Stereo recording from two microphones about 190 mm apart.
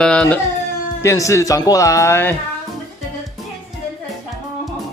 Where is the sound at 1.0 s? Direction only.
15° left (ahead or behind).